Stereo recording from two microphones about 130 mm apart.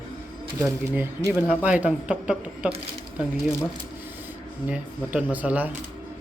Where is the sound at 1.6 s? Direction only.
10° right (ahead or behind).